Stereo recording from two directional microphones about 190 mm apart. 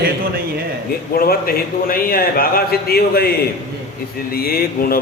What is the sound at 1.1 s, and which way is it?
Speech, 50° left (ahead or behind).